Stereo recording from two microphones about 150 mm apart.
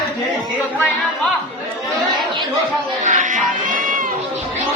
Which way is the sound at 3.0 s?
55° right (ahead or behind).